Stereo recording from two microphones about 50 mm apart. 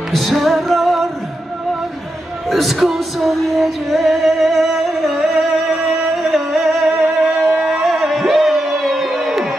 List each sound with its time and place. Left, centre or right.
0.1 s music: centre
2.5 s music: centre
7.2 s music: right
7.6 s music: centre